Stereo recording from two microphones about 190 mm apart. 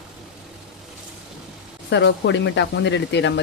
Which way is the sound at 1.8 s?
70° left (ahead or behind).